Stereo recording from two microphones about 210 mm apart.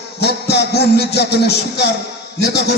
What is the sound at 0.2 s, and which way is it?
A man's voice, 50° left (ahead or behind).